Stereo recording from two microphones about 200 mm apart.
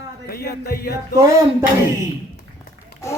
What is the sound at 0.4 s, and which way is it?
Music, 50° left (ahead or behind).